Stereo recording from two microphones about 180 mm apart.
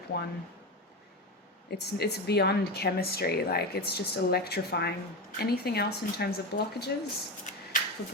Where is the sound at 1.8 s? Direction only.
65° left (ahead or behind).